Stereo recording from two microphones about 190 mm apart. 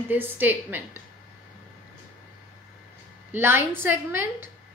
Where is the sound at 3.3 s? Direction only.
10° right (ahead or behind).